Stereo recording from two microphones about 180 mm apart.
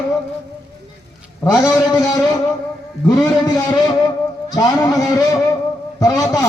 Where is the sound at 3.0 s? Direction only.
20° left (ahead or behind).